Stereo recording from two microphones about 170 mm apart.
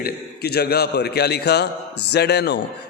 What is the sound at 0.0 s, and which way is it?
A man's voice, 70° left (ahead or behind).